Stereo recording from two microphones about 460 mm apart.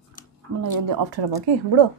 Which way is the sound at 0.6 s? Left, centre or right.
Right.